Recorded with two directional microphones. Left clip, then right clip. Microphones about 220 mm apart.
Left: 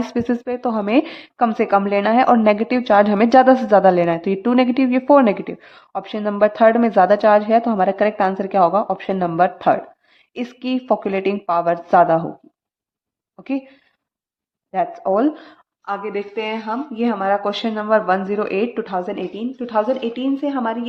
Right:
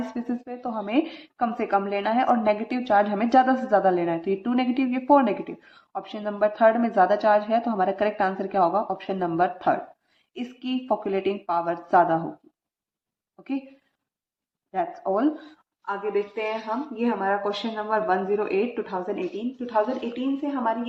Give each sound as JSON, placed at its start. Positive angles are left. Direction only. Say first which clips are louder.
{"t": 0.1, "sound": "a woman's voice", "louder": "left 11 dB", "side_deg": 45}
{"t": 14.7, "sound": "a woman's voice", "louder": "left 7 dB", "side_deg": 30}
{"t": 15.9, "sound": "a woman's voice", "louder": "left 2 dB", "side_deg": 45}